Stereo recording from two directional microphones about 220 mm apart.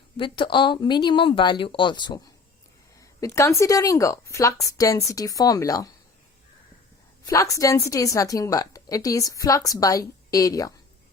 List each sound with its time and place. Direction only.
0.2 s speech: 20° left (ahead or behind)
7.3 s speech: 15° left (ahead or behind)